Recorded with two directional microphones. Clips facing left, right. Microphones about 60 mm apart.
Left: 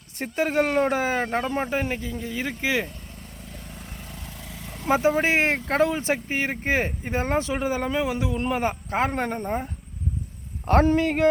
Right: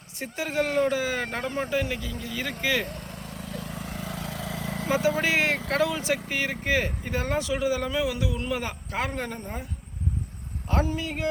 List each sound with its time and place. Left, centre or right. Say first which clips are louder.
0.2 s speech: left 5 dB; left
3.5 s vehicle: right 7 dB; right
4.9 s speech: left 4 dB; left
10.7 s speech: left 8 dB; left